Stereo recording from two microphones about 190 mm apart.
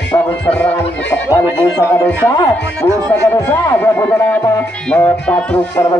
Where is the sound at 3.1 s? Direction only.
10° left (ahead or behind).